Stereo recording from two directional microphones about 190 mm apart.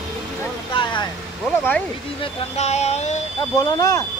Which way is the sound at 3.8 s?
20° left (ahead or behind).